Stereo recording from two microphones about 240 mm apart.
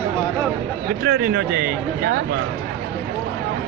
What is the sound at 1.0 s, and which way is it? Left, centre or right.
Speech, right.